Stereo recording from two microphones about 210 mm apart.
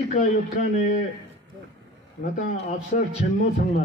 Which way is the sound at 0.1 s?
35° left (ahead or behind).